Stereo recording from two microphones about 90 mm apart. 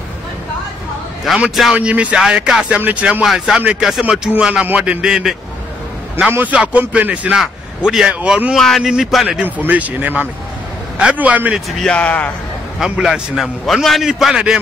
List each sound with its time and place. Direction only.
1.2 s a man's voice: 5° right (ahead or behind)
6.3 s speech: 15° right (ahead or behind)
8.5 s a man's voice: 5° left (ahead or behind)
9.7 s speech: 15° right (ahead or behind)
11.8 s speech: 15° left (ahead or behind)
12.7 s a man's voice: 5° right (ahead or behind)